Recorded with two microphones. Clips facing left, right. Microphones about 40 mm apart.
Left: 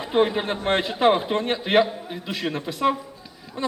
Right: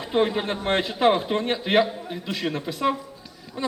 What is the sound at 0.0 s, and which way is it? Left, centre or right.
A man's voice, centre.